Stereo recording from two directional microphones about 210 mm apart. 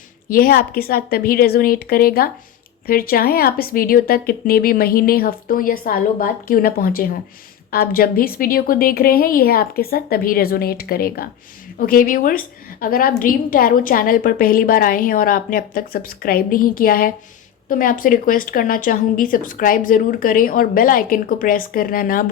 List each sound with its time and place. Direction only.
0.3 s a woman's voice: 45° left (ahead or behind)